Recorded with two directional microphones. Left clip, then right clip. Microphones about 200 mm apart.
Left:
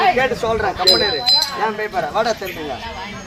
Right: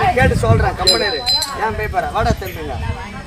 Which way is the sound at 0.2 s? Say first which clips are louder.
Right 2 dB; 20° right (ahead or behind).